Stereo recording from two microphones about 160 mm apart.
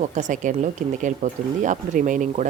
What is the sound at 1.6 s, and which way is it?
Speech, 50° right (ahead or behind).